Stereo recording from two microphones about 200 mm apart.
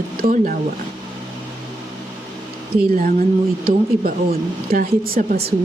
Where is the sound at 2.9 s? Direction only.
45° right (ahead or behind).